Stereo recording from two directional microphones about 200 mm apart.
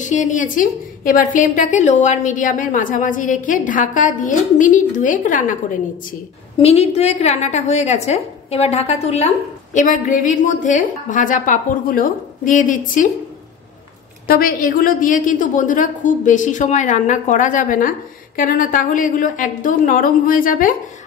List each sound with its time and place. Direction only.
0.0 s a woman's voice: 40° left (ahead or behind)
6.6 s a woman's voice: 30° left (ahead or behind)
14.2 s a woman's voice: 45° left (ahead or behind)